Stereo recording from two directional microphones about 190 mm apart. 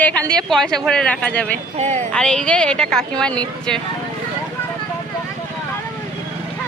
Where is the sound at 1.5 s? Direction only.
40° right (ahead or behind).